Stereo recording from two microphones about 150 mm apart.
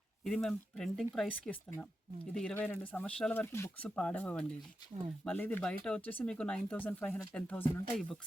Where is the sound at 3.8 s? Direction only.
5° left (ahead or behind).